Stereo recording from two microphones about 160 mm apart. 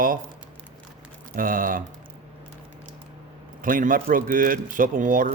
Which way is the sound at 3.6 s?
60° right (ahead or behind).